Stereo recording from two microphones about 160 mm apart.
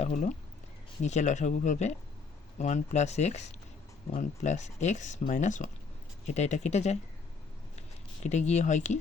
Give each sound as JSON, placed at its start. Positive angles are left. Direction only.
{"t": 0.0, "sound": "speech", "side_deg": 45}